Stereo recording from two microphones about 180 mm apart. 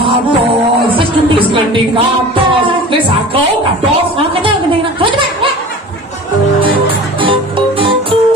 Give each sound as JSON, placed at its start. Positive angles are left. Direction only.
{"t": 7.2, "sound": "music", "side_deg": -30}